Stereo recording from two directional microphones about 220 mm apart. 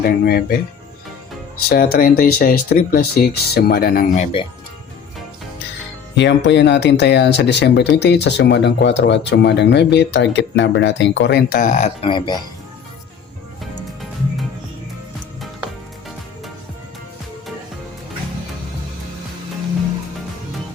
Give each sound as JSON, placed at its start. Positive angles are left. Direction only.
{"t": 0.0, "sound": "speech", "side_deg": 45}
{"t": 1.7, "sound": "speech", "side_deg": 40}
{"t": 6.1, "sound": "speech", "side_deg": 55}